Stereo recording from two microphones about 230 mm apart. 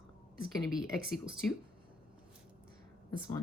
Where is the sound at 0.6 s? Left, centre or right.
Centre.